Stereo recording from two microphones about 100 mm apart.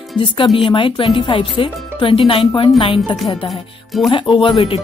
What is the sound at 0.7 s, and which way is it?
Speech, 55° left (ahead or behind).